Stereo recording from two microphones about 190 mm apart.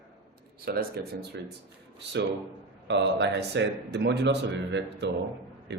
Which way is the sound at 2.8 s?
65° right (ahead or behind).